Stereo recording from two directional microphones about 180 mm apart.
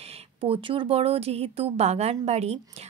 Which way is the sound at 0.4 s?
30° right (ahead or behind).